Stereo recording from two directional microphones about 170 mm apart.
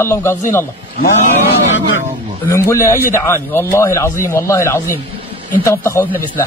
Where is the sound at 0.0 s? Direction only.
15° left (ahead or behind).